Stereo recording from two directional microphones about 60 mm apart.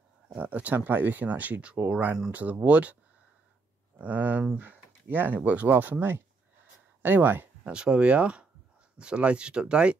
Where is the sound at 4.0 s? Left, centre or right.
Right.